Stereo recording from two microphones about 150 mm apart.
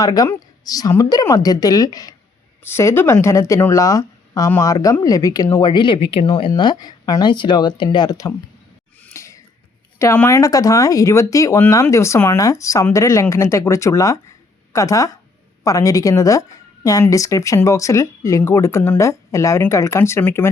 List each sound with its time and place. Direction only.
0.0 s speech: 25° left (ahead or behind)
9.0 s a sound: 15° left (ahead or behind)
10.0 s speech: 20° left (ahead or behind)